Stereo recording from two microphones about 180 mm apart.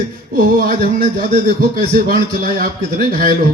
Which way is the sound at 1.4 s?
55° right (ahead or behind).